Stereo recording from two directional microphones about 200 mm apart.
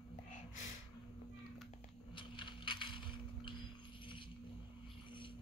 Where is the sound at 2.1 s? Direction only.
25° left (ahead or behind).